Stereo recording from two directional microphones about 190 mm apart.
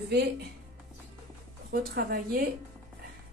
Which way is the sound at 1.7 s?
55° right (ahead or behind).